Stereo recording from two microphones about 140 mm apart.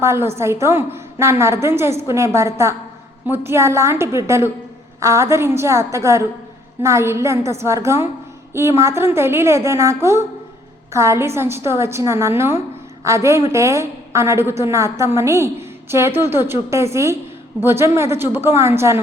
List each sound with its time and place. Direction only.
0.0 s a woman's voice: 20° right (ahead or behind)